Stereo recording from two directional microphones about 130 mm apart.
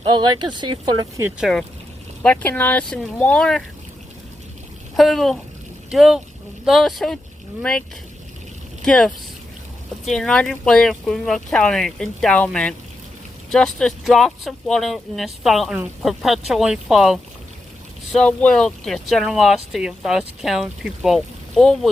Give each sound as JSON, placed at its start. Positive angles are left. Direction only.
{"t": 0.3, "sound": "speech", "side_deg": -35}
{"t": 1.4, "sound": "speech", "side_deg": 0}
{"t": 2.2, "sound": "speech", "side_deg": 10}
{"t": 4.9, "sound": "speech", "side_deg": 0}
{"t": 13.7, "sound": "speech", "side_deg": 0}